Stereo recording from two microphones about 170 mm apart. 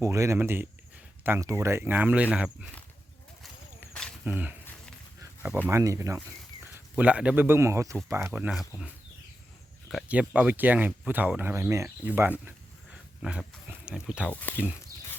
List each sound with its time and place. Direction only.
0.0 s speech: 15° right (ahead or behind)
4.3 s speech: 10° right (ahead or behind)
5.2 s a sound: 10° right (ahead or behind)
5.6 s speech: 20° right (ahead or behind)
9.9 s speech: 10° right (ahead or behind)
14.3 s speech: 10° left (ahead or behind)